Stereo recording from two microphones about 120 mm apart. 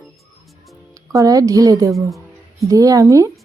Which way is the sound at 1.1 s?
30° right (ahead or behind).